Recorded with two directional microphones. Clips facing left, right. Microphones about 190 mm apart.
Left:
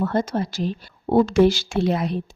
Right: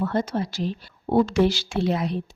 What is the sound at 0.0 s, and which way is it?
A woman's voice, 45° left (ahead or behind).